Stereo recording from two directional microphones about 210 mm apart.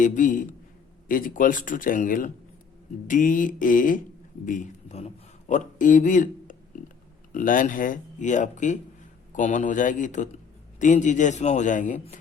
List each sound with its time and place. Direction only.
0.0 s a man's voice: 40° left (ahead or behind)